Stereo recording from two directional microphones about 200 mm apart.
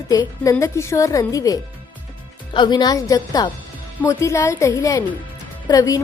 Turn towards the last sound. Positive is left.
turn(degrees=15)  # may be behind; listen again after turning